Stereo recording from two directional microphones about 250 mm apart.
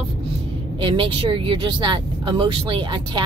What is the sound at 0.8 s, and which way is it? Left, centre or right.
Speech, centre.